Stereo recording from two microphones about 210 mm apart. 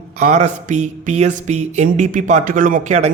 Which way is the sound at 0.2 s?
35° right (ahead or behind).